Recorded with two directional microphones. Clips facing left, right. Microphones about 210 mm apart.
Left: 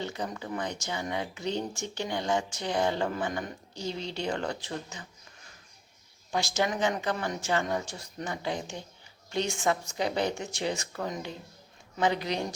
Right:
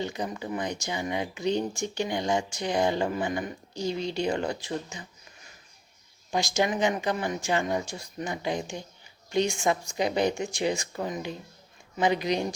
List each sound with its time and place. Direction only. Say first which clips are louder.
0.0 s speech: right 3 dB; 15° right (ahead or behind)
6.3 s speech: right 3 dB; 15° right (ahead or behind)